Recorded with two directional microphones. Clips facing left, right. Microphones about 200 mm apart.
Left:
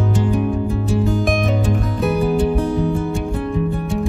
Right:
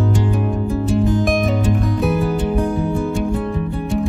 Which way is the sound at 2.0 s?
Centre (ahead or behind).